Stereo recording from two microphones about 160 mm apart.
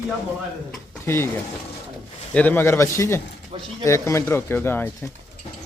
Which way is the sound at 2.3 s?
10° left (ahead or behind).